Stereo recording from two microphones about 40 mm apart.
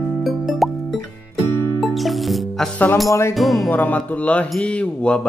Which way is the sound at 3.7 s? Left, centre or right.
Left.